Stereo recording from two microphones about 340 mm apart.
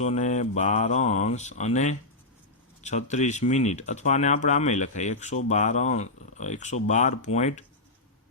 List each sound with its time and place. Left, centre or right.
0.0 s speech: centre